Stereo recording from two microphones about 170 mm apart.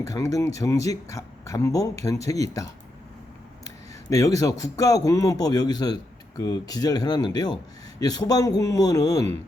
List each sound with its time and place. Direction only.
0.0 s speech: 20° left (ahead or behind)
4.1 s speech: 20° left (ahead or behind)